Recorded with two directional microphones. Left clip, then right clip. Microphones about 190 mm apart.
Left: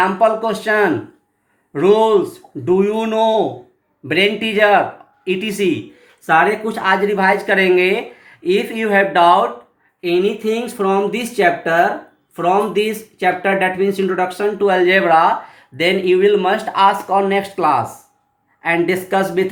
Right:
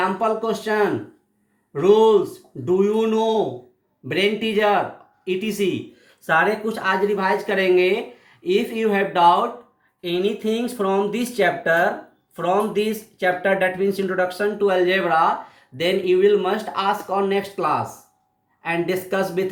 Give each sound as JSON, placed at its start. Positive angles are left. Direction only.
{"t": 0.0, "sound": "speech", "side_deg": 35}